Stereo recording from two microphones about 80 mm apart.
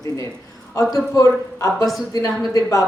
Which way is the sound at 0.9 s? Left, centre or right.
Left.